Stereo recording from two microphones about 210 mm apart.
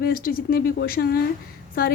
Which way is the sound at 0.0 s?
45° left (ahead or behind).